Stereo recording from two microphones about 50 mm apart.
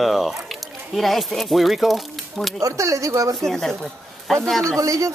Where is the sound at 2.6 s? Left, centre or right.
Right.